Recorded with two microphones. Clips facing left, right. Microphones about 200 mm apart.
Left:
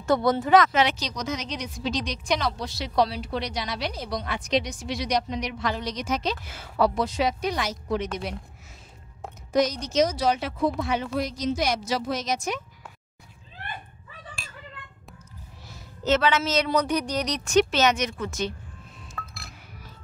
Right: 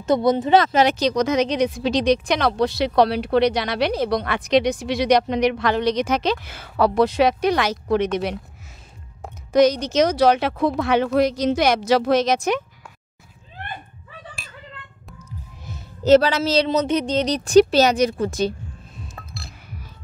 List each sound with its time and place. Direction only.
0.0 s speech: 20° right (ahead or behind)
0.8 s a woman's voice: 55° right (ahead or behind)
9.5 s a woman's voice: 70° right (ahead or behind)
16.0 s a woman's voice: 35° right (ahead or behind)
19.1 s heart sounds: 30° right (ahead or behind)